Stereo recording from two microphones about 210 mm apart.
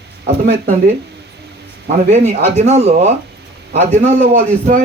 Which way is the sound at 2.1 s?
30° right (ahead or behind).